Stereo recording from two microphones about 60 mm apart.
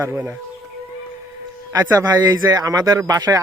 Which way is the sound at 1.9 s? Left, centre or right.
Right.